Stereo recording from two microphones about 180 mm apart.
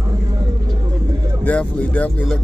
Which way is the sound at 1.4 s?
5° left (ahead or behind).